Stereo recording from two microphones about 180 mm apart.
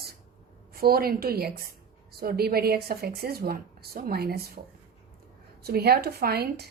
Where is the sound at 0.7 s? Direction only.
55° right (ahead or behind).